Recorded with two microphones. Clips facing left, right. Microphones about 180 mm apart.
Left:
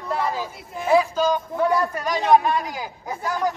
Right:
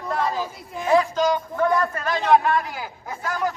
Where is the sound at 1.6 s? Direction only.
15° left (ahead or behind).